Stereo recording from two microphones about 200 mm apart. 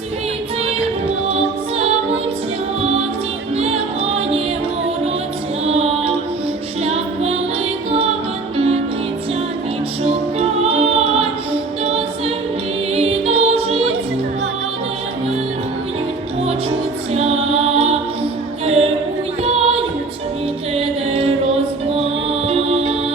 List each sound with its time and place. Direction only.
1.3 s music: 30° right (ahead or behind)
3.6 s music: 30° right (ahead or behind)
5.6 s music: 30° right (ahead or behind)
10.0 s music: 30° right (ahead or behind)
17.2 s music: 30° right (ahead or behind)
22.3 s music: 30° right (ahead or behind)